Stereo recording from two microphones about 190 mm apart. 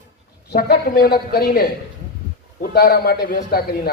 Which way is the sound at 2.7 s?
60° left (ahead or behind).